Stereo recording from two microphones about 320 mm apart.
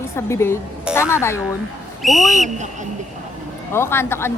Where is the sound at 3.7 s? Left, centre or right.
Centre.